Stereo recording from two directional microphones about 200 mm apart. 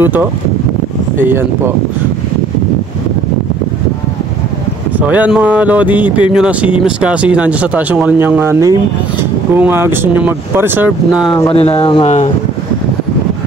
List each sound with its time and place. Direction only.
0.0 s speech: 10° right (ahead or behind)
4.9 s speech: 10° right (ahead or behind)
11.4 s speech: 30° left (ahead or behind)